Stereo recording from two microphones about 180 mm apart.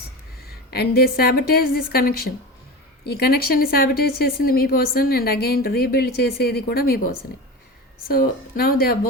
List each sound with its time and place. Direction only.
0.4 s a woman's voice: 60° left (ahead or behind)